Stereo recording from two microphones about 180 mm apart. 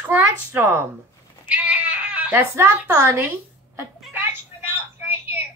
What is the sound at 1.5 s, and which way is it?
Cat, 5° right (ahead or behind).